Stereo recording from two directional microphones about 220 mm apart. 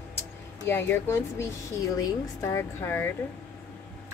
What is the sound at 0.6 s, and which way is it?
Speech, 10° left (ahead or behind).